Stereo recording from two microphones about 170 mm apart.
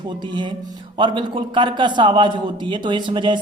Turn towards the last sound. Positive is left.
turn(degrees=-30)  # may be behind; listen again after turning